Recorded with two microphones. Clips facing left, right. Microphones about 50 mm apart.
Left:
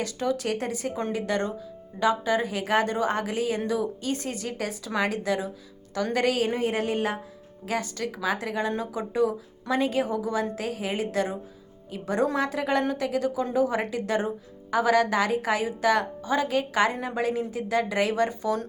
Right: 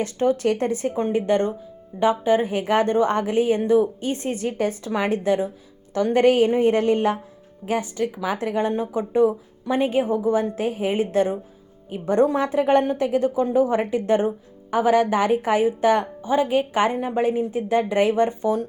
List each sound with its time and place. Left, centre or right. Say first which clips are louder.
0.0 s a woman's voice: right 7 dB; right
7.6 s a woman's voice: right 6 dB; right